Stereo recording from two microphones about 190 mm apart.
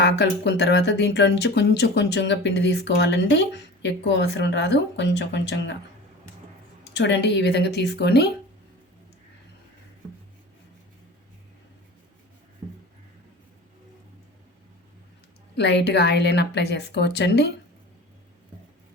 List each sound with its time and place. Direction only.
0.0 s speech: 65° left (ahead or behind)
6.9 s speech: 70° left (ahead or behind)
15.5 s speech: 65° left (ahead or behind)